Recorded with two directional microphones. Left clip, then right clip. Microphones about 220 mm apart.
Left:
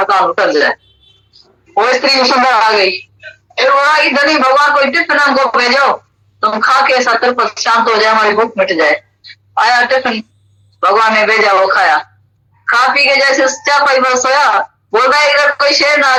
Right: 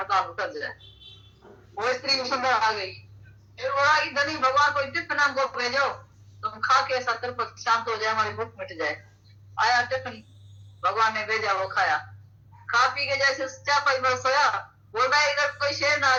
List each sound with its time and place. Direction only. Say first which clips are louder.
0.0 s a woman's voice: left 16 dB; 50° left (ahead or behind)